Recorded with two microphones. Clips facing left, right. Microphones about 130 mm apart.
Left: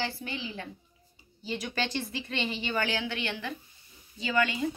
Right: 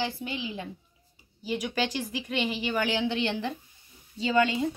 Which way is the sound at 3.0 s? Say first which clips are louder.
Right 6 dB; 25° right (ahead or behind).